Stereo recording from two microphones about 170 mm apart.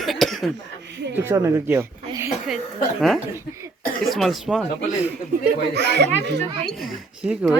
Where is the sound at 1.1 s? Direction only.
15° right (ahead or behind).